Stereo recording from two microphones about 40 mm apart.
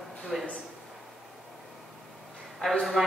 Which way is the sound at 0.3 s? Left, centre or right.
Centre.